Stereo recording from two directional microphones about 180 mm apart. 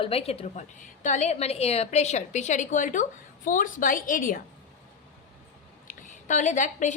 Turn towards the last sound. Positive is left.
turn(degrees=45)  # may be behind; listen again after turning